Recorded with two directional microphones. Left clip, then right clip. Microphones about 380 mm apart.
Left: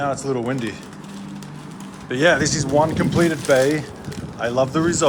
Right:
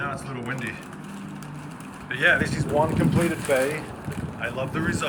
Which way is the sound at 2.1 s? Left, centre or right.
Centre.